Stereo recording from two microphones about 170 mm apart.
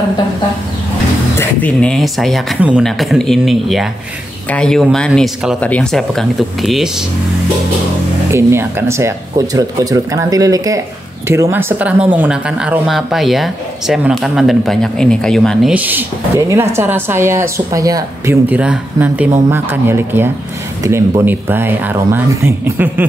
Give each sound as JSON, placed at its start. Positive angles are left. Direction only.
{"t": 1.4, "sound": "speech", "side_deg": 5}
{"t": 8.3, "sound": "speech", "side_deg": -15}
{"t": 15.7, "sound": "speech", "side_deg": -10}